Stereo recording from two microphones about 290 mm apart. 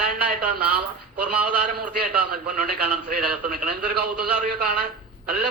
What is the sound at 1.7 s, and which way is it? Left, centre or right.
A man's voice, right.